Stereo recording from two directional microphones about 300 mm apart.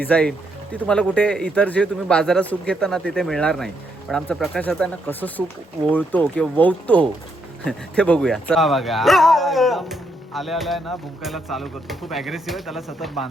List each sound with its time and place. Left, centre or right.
0.0 s speech: centre